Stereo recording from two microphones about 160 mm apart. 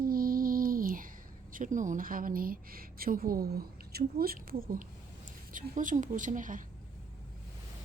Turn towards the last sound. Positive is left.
turn(degrees=-55)  # may be behind; listen again after turning